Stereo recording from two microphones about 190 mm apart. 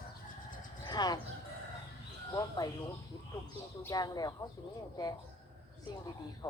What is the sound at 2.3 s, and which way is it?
Speech, 20° left (ahead or behind).